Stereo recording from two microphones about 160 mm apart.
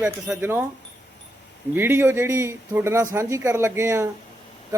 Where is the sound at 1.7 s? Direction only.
15° right (ahead or behind).